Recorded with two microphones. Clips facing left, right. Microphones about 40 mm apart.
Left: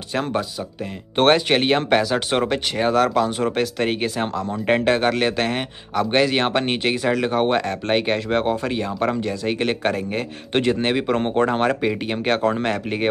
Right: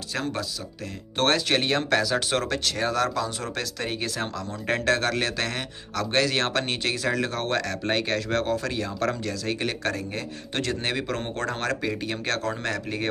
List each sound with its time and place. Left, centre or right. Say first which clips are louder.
0.1 s speech: left 6 dB; left
4.2 s speech: left 7 dB; left